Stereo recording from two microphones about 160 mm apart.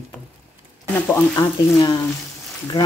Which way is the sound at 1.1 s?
15° left (ahead or behind).